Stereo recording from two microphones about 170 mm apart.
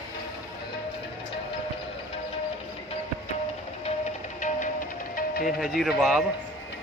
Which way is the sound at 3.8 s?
45° left (ahead or behind).